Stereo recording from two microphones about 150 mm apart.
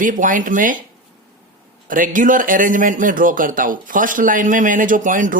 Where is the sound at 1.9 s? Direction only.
65° right (ahead or behind).